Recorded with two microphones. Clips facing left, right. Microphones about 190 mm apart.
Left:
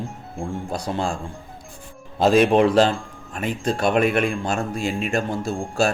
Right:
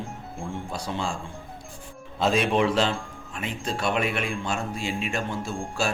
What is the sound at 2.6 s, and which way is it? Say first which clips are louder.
Speech: left 6 dB; 45° left (ahead or behind).